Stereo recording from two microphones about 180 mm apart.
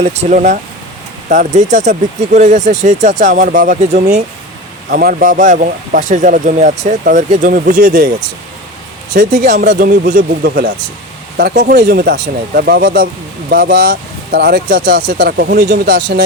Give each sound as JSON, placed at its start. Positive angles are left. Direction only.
{"t": 0.0, "sound": "speech", "side_deg": -40}
{"t": 9.1, "sound": "speech", "side_deg": -45}
{"t": 9.6, "sound": "speech", "side_deg": -55}